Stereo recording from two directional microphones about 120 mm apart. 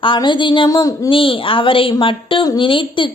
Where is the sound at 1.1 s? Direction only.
45° left (ahead or behind).